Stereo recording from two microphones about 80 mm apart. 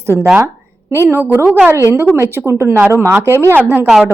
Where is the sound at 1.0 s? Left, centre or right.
Right.